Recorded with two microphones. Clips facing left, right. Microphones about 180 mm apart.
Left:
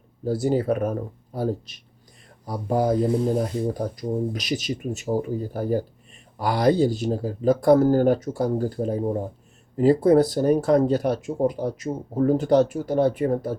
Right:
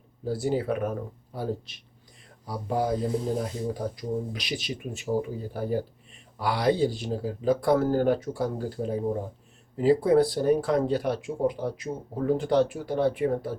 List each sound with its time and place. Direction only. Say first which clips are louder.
0.3 s speech: left 5 dB; 40° left (ahead or behind)
3.1 s speech: left 6 dB; 65° left (ahead or behind)
3.9 s speech: left 5 dB; 45° left (ahead or behind)